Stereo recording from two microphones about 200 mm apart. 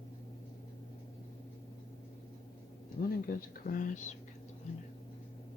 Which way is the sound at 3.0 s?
45° left (ahead or behind).